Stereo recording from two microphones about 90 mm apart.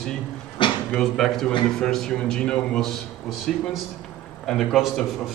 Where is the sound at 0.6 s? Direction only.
65° left (ahead or behind).